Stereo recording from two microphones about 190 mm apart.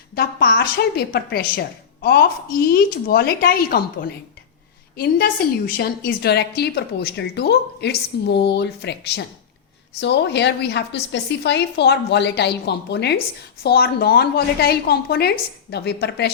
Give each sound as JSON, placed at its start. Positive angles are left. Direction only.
{"t": 0.2, "sound": "a woman's voice", "side_deg": 55}